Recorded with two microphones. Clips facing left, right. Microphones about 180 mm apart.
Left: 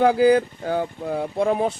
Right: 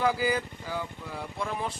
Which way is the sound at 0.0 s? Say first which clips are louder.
Left 11 dB; 65° left (ahead or behind).